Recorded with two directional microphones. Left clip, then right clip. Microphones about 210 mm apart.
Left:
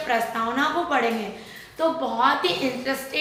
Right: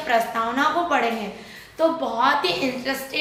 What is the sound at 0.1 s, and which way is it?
Speech, 15° right (ahead or behind).